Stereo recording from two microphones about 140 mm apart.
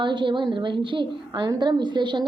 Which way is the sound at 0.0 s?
35° right (ahead or behind).